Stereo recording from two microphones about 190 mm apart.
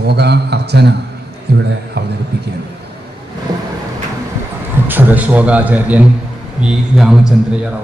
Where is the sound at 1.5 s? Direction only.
60° right (ahead or behind).